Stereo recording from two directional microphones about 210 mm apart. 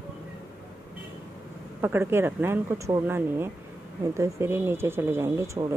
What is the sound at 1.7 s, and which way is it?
Speech, 10° right (ahead or behind).